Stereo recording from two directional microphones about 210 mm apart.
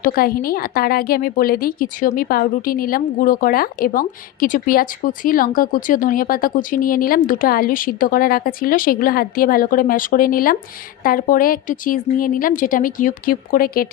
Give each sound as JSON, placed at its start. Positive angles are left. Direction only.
{"t": 0.0, "sound": "a woman's voice", "side_deg": 45}